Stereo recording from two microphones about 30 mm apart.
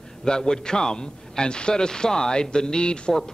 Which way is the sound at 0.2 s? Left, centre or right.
Left.